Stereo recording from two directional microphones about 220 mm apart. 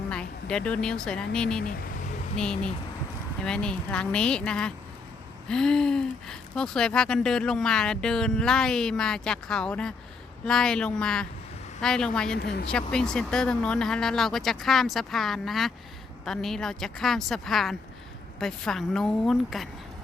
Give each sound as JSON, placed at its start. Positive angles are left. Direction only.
{"t": 0.1, "sound": "speech", "side_deg": 5}
{"t": 12.4, "sound": "speech", "side_deg": 45}
{"t": 12.7, "sound": "speech", "side_deg": 5}